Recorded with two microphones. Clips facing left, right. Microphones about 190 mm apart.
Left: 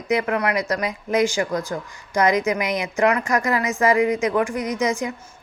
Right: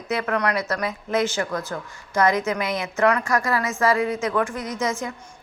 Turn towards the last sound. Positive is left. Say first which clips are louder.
# left 4 dB
turn(degrees=15)  # may be behind; listen again after turning